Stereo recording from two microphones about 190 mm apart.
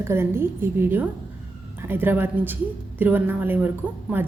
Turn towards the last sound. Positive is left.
turn(degrees=-10)  # may be behind; listen again after turning